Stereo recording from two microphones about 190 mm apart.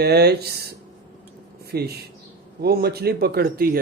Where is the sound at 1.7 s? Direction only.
55° right (ahead or behind).